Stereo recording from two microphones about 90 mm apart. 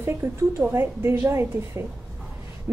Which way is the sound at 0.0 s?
30° right (ahead or behind).